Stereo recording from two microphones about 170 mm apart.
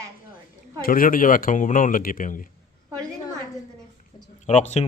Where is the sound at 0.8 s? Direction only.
55° left (ahead or behind).